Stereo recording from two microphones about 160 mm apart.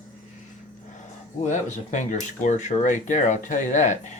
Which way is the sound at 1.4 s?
50° left (ahead or behind).